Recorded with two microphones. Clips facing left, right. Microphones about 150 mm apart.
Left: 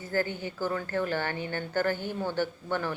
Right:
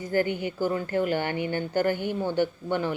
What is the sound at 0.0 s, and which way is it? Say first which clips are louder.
A woman's voice: right 5 dB; 15° right (ahead or behind).